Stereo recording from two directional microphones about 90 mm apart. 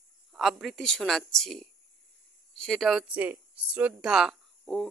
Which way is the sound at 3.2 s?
20° right (ahead or behind).